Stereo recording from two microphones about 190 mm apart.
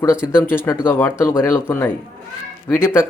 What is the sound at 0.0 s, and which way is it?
Speech, 15° left (ahead or behind).